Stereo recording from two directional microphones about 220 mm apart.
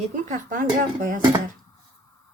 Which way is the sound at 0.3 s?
35° right (ahead or behind).